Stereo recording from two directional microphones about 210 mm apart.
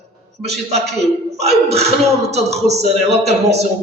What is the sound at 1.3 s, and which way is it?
A man's voice, 30° right (ahead or behind).